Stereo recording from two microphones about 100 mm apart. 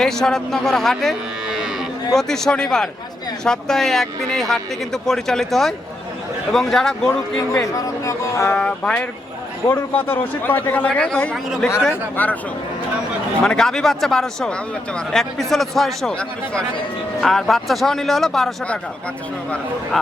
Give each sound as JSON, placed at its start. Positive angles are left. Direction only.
{"t": 0.0, "sound": "speech", "side_deg": 5}
{"t": 2.1, "sound": "speech", "side_deg": 5}
{"t": 7.1, "sound": "a man's voice", "side_deg": 25}
{"t": 8.4, "sound": "a man's voice", "side_deg": 15}
{"t": 13.4, "sound": "speech", "side_deg": 5}